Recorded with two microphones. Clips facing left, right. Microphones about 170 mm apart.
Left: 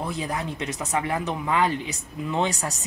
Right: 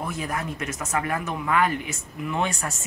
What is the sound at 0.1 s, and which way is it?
Speech, 20° left (ahead or behind).